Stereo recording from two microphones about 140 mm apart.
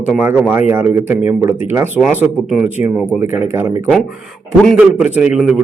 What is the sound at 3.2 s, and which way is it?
Speech, 15° right (ahead or behind).